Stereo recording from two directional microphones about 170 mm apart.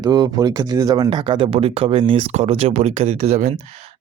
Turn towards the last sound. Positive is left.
turn(degrees=-40)  # may be behind; listen again after turning